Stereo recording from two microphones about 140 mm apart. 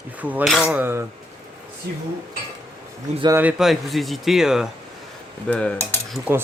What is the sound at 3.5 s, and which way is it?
Speech, centre (ahead or behind).